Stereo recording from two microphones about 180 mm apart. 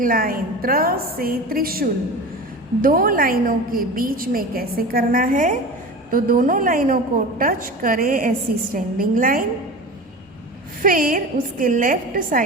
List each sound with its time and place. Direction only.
0.0 s a woman's voice: 50° right (ahead or behind)
10.8 s a woman's voice: 50° right (ahead or behind)